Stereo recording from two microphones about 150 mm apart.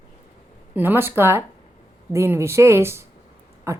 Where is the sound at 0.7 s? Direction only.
15° right (ahead or behind).